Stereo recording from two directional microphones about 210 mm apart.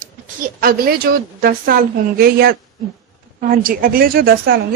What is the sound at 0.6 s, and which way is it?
A woman's voice, 45° right (ahead or behind).